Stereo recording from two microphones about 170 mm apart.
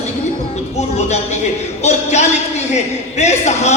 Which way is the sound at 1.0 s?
40° left (ahead or behind).